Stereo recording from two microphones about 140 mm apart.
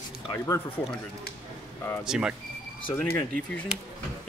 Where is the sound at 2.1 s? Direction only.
5° right (ahead or behind).